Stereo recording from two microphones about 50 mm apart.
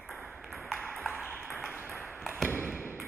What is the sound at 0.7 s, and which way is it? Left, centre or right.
Ping, left.